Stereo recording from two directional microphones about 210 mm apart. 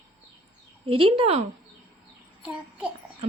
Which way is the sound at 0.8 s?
25° right (ahead or behind).